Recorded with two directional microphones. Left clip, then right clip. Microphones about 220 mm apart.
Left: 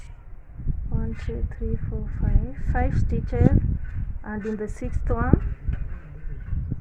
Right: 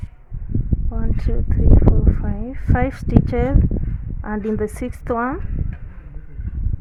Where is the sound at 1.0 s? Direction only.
50° right (ahead or behind).